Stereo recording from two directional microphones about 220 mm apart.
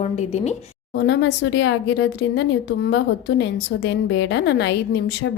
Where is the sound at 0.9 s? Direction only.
50° left (ahead or behind).